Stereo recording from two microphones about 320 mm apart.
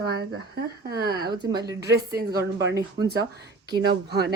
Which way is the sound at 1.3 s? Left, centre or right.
Centre.